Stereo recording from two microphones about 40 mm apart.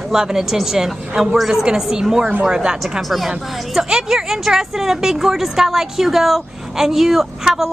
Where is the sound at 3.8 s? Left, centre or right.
Right.